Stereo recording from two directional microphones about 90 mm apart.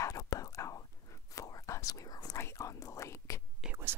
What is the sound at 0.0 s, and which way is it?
Whispering, 40° left (ahead or behind).